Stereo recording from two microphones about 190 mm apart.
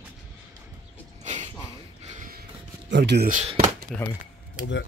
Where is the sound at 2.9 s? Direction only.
65° right (ahead or behind).